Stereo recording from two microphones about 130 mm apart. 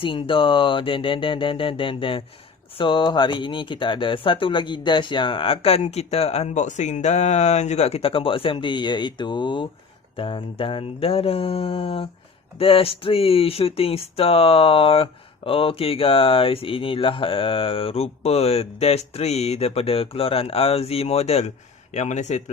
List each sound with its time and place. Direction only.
0.0 s speech: 40° left (ahead or behind)
21.9 s speech: 65° left (ahead or behind)